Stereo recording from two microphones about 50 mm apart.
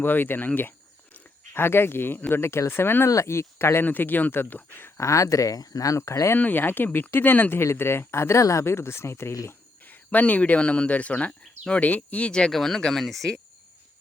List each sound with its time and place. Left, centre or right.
0.0 s speech: left
1.5 s speech: left
2.3 s speech: left
3.2 s speech: left
3.8 s speech: left
4.9 s speech: left
6.3 s speech: left
7.8 s speech: left
9.8 s speech: left
12.5 s speech: centre